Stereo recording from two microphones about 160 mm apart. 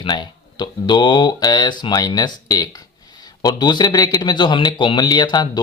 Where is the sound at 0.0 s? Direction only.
30° left (ahead or behind).